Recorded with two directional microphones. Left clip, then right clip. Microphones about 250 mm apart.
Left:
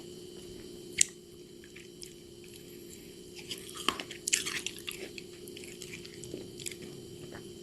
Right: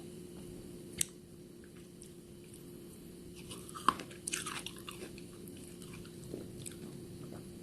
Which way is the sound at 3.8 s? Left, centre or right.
Centre.